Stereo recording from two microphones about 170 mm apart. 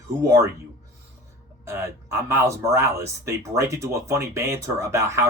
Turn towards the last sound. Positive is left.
turn(degrees=-15)  # may be behind; listen again after turning